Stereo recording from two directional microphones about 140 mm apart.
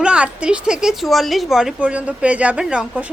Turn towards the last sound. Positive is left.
turn(degrees=-10)  # may be behind; listen again after turning